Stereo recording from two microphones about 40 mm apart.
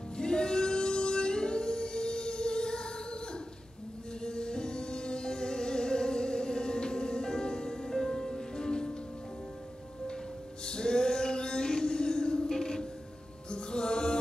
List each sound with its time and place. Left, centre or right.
0.2 s singing: centre
4.2 s music: centre
10.6 s music: centre